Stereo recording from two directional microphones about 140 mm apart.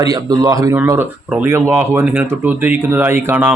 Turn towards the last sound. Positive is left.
turn(degrees=-15)  # may be behind; listen again after turning